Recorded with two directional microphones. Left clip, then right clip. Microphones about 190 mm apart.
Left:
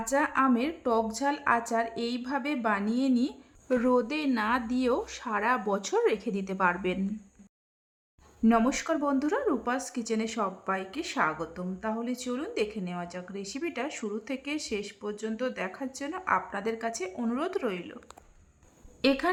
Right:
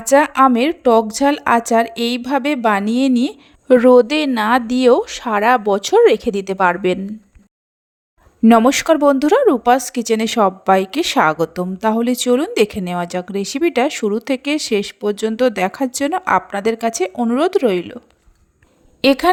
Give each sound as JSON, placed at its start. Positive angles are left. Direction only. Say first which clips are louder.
{"t": 0.0, "sound": "speech", "louder": "right 15 dB", "side_deg": -45}
{"t": 8.4, "sound": "speech", "louder": "right 15 dB", "side_deg": -45}
{"t": 19.0, "sound": "speech", "louder": "right 13 dB", "side_deg": -45}